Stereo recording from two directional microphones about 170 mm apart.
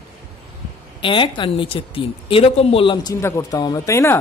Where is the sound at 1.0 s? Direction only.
30° left (ahead or behind).